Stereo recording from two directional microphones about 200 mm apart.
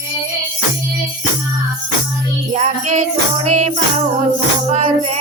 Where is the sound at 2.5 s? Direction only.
35° right (ahead or behind).